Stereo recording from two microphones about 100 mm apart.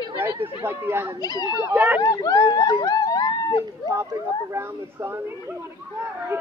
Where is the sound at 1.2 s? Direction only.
40° left (ahead or behind).